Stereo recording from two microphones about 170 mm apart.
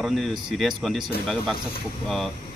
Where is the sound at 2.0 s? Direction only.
Centre (ahead or behind).